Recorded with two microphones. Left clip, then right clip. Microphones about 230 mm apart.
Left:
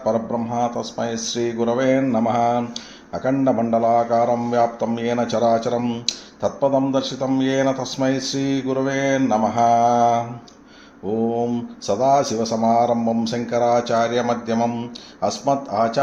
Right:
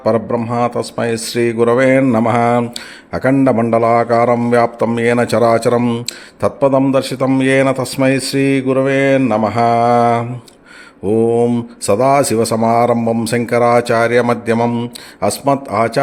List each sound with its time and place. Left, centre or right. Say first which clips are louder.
0.0 s speech: right 6 dB; right